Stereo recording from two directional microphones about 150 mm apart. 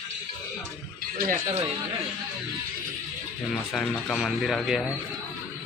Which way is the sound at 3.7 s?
Centre (ahead or behind).